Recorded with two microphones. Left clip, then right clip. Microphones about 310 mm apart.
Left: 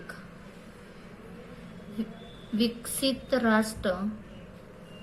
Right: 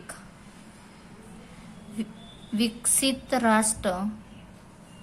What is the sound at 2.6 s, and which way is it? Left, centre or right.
A woman's voice, right.